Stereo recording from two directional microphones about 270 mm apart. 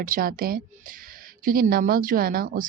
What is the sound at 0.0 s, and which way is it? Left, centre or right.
Speech, right.